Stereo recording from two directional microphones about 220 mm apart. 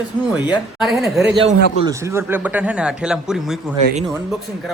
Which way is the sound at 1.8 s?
15° right (ahead or behind).